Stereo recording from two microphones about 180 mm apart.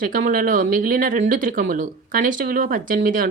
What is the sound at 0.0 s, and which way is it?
Speech, 45° right (ahead or behind).